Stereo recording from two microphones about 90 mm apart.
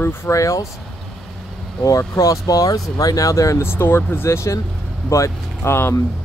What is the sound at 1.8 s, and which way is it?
Speech, 40° left (ahead or behind).